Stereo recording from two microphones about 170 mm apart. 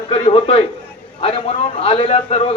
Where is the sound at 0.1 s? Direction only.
35° left (ahead or behind).